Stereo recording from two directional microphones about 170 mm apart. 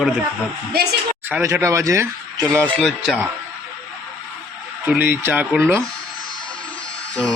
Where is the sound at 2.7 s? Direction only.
Centre (ahead or behind).